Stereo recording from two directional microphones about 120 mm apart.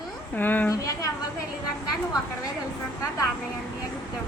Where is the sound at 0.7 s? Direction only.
30° left (ahead or behind).